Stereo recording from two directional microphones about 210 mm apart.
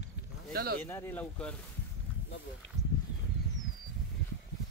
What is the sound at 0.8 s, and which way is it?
Speech, 10° left (ahead or behind).